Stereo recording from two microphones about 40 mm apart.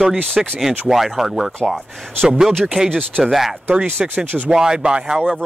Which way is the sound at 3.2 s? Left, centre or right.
Centre.